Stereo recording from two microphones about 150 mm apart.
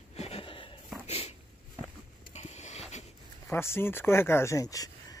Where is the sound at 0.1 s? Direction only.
45° left (ahead or behind).